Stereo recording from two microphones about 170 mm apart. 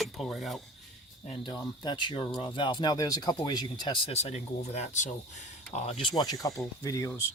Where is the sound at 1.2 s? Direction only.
30° left (ahead or behind).